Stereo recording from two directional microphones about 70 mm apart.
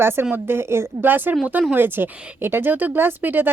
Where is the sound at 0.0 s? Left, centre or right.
Right.